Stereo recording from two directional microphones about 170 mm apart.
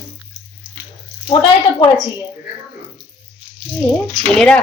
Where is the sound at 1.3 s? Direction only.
30° left (ahead or behind).